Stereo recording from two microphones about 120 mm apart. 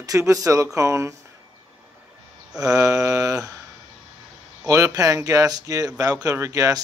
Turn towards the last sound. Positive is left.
turn(degrees=-30)  # may be behind; listen again after turning